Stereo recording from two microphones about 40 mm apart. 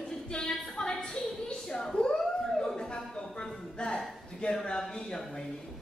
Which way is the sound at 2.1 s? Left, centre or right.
Centre.